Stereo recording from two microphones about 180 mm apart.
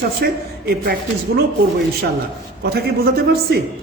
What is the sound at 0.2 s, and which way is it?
Speech, 60° right (ahead or behind).